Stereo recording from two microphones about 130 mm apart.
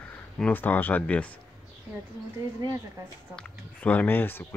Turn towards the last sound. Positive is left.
turn(degrees=15)  # may be behind; listen again after turning